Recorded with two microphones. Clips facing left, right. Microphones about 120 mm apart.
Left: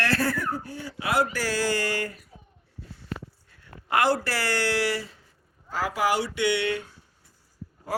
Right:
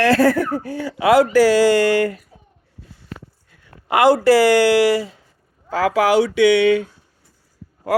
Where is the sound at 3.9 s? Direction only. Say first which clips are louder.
Right 11 dB; 90° right.